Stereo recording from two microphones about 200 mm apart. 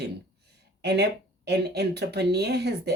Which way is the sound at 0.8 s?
55° right (ahead or behind).